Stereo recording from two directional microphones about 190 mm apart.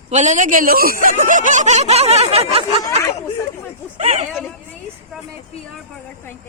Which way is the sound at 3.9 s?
35° right (ahead or behind).